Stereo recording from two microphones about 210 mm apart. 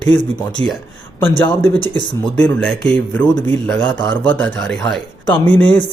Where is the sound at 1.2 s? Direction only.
10° left (ahead or behind).